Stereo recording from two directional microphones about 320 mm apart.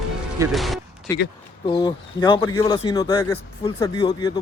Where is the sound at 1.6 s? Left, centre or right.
Centre.